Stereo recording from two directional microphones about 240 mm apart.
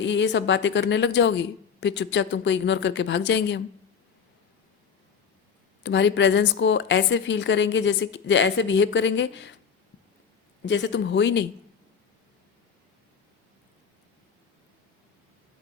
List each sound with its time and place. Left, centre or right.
0.0 s a woman's voice: left
5.8 s a woman's voice: left
10.7 s a woman's voice: left